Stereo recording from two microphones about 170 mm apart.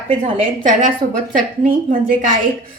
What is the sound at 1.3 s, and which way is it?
Speech, 55° right (ahead or behind).